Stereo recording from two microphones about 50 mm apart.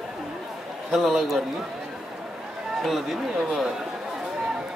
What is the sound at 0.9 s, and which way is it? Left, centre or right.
Speech, centre.